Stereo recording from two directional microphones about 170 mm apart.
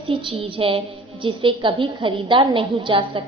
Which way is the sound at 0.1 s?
30° right (ahead or behind).